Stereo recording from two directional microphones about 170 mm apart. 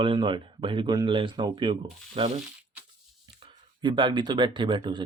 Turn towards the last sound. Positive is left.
turn(degrees=-30)  # may be behind; listen again after turning